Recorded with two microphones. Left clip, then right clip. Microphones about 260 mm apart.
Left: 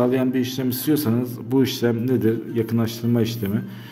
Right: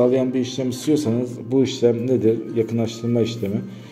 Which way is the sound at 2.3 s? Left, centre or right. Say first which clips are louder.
Right 3 dB; centre.